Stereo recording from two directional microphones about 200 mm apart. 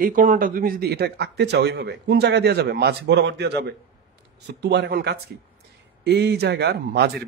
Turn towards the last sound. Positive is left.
turn(degrees=-55)  # may be behind; listen again after turning